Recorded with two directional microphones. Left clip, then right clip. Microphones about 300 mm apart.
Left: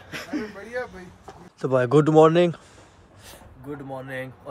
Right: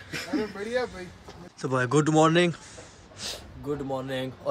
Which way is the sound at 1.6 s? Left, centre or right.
Centre.